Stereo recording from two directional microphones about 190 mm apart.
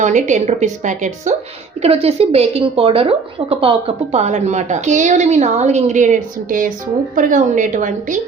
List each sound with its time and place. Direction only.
0.0 s a woman's voice: 40° right (ahead or behind)